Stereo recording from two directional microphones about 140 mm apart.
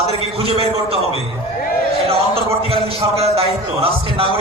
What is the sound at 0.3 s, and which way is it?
Speech, 45° right (ahead or behind).